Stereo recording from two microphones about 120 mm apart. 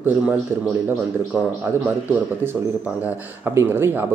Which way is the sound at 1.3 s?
15° right (ahead or behind).